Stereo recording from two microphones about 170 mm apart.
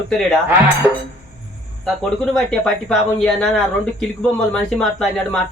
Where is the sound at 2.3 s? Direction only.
5° left (ahead or behind).